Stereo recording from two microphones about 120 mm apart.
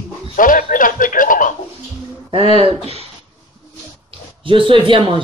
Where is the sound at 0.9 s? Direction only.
90° left.